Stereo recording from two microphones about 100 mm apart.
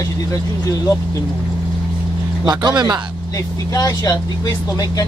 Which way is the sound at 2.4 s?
45° right (ahead or behind).